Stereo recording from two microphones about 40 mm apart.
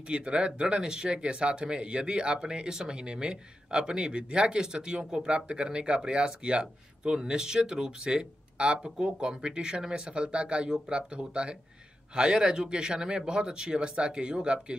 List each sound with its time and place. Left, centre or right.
0.1 s speech: right